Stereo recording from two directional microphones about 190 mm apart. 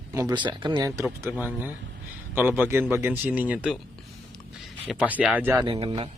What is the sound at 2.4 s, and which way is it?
Speech, 10° right (ahead or behind).